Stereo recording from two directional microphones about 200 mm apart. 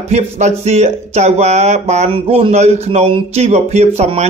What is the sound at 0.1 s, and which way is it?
Speech, 35° right (ahead or behind).